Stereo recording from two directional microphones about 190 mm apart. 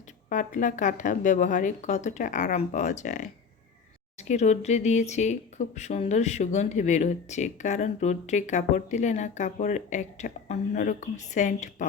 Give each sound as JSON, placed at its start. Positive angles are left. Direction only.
{"t": 0.3, "sound": "speech", "side_deg": 40}